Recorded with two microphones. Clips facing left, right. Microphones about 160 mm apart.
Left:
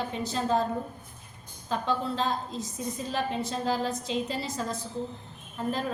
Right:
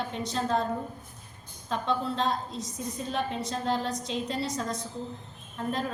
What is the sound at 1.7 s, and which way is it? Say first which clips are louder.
A woman's voice: even; centre (ahead or behind).